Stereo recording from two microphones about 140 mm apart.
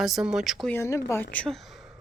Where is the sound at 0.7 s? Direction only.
20° left (ahead or behind).